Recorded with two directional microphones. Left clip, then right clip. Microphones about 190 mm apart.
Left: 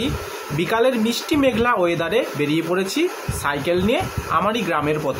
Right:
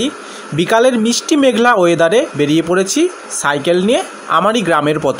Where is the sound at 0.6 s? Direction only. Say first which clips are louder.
Right 7 dB; 30° right (ahead or behind).